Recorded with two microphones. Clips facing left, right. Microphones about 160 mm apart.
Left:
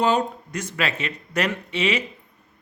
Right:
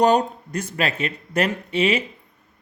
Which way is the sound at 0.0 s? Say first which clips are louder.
Right 4 dB; 40° right (ahead or behind).